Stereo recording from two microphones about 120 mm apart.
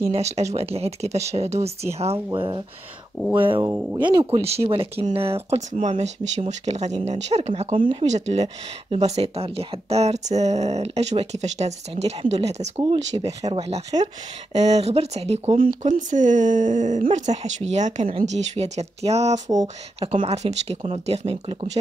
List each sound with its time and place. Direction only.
0.1 s speech: 65° right (ahead or behind)
2.3 s speech: 45° right (ahead or behind)
3.6 s speech: 20° right (ahead or behind)
4.0 s speech: 40° right (ahead or behind)
5.7 s speech: 75° right (ahead or behind); by 8.1 s 45° right (ahead or behind)
8.1 s speech: 65° right (ahead or behind)
13.1 s speech: 40° right (ahead or behind)
13.5 s speech: 55° right (ahead or behind); by 18.0 s 75° right (ahead or behind)
18.0 s speech: 65° right (ahead or behind)
19.3 s a sound: 30° right (ahead or behind)
20.0 s speech: 60° right (ahead or behind)